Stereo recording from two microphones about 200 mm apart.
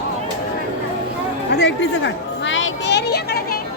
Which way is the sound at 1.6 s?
65° left (ahead or behind).